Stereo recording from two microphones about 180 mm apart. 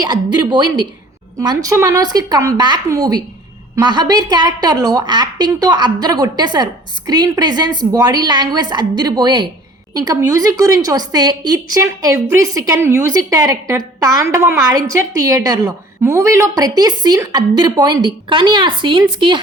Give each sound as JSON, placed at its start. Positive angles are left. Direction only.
{"t": 0.0, "sound": "a woman's voice", "side_deg": -25}